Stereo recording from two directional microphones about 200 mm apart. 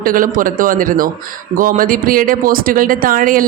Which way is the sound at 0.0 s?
45° right (ahead or behind).